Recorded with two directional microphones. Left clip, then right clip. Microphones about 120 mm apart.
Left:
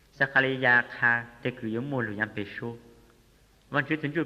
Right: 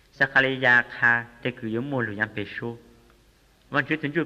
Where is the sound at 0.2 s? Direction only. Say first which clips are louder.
Right 3 dB; 45° left (ahead or behind).